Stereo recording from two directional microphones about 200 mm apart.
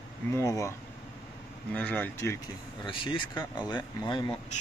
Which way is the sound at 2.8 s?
25° left (ahead or behind).